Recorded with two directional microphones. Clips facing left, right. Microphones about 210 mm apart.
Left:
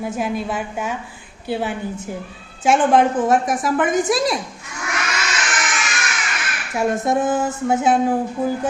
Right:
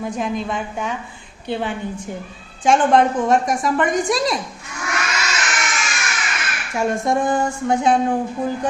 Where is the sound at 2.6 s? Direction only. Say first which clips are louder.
Even; 5° left (ahead or behind).